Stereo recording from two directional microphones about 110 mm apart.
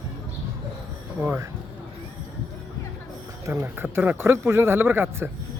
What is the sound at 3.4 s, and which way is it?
Speech, 25° right (ahead or behind).